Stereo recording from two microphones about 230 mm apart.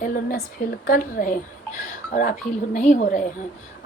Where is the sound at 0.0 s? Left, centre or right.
Left.